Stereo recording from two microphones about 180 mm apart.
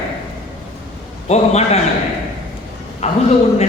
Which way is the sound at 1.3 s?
35° left (ahead or behind).